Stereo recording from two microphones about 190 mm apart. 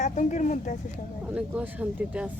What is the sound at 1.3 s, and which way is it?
Speech, 5° right (ahead or behind).